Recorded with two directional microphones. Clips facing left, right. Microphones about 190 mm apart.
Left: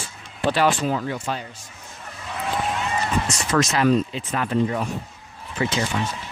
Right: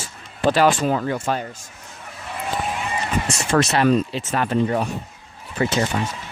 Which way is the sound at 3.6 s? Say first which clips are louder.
Even; 65° right (ahead or behind).